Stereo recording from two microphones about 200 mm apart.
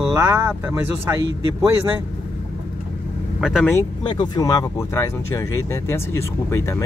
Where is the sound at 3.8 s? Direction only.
20° left (ahead or behind).